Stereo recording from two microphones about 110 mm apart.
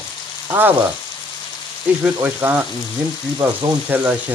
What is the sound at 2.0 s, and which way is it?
Speech, 20° right (ahead or behind).